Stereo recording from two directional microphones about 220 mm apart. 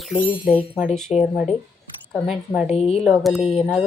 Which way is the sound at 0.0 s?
Centre (ahead or behind).